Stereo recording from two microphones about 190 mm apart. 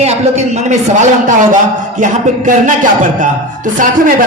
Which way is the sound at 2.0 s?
40° right (ahead or behind).